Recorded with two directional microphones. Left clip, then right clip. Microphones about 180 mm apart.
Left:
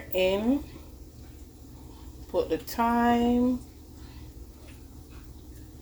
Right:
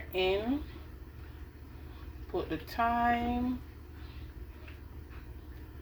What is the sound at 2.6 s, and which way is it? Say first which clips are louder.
Speech: even; 40° left (ahead or behind).